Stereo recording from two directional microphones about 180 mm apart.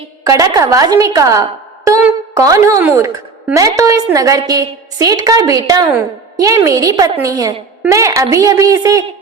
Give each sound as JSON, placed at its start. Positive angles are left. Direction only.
{"t": 0.3, "sound": "a woman's voice", "side_deg": -20}